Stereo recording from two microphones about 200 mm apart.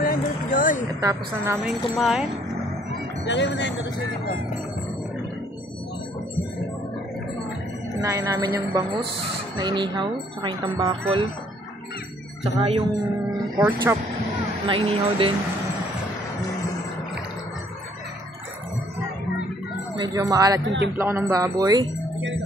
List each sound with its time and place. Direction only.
0.0 s a sound: 45° left (ahead or behind)
1.0 s a woman's voice: 15° right (ahead or behind)
2.0 s speech: centre (ahead or behind)
3.3 s speech: 60° left (ahead or behind)
8.0 s a woman's voice: 15° right (ahead or behind)
12.5 s speech: 30° right (ahead or behind)
13.6 s a woman's voice: 15° right (ahead or behind)
14.7 s speech: 25° right (ahead or behind)
20.0 s a woman's voice: 15° right (ahead or behind)